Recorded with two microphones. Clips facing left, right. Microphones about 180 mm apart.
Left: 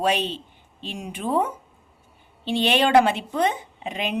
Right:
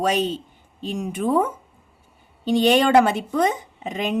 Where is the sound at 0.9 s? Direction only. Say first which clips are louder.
Right 4 dB; 45° right (ahead or behind).